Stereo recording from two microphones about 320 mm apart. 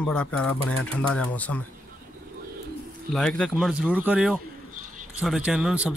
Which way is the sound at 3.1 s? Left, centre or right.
Centre.